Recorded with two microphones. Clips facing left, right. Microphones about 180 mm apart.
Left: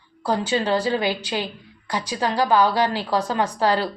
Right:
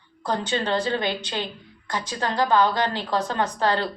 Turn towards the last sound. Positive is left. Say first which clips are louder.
# left 2 dB
turn(degrees=10)  # may be behind; listen again after turning